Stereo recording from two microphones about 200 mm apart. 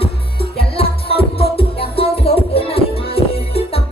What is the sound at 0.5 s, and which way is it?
Music, 30° left (ahead or behind).